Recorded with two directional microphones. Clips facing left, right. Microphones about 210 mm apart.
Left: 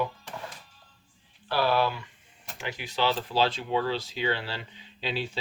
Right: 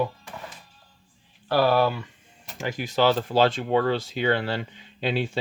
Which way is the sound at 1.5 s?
45° right (ahead or behind).